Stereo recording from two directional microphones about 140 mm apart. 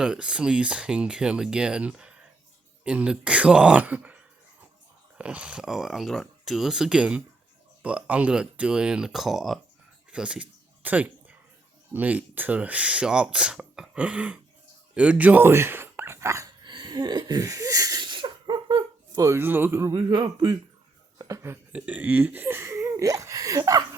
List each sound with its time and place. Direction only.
0.0 s speech: 5° right (ahead or behind)
10.1 s a sound: 5° right (ahead or behind)
11.9 s speech: 10° right (ahead or behind)
16.6 s sneeze: 35° right (ahead or behind); by 19.9 s 15° right (ahead or behind)
19.9 s speech: 30° right (ahead or behind)
21.2 s a sound: 20° right (ahead or behind)
21.8 s speech: 10° right (ahead or behind); by 24.0 s 25° right (ahead or behind)